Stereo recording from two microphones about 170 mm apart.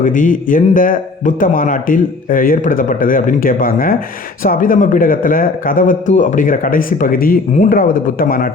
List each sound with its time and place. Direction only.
0.0 s a man's voice: 50° left (ahead or behind)